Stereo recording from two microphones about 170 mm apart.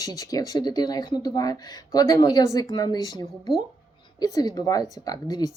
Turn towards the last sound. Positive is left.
turn(degrees=20)  # may be behind; listen again after turning